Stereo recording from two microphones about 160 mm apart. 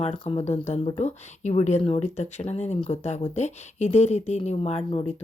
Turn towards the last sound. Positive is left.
turn(degrees=40)  # may be behind; listen again after turning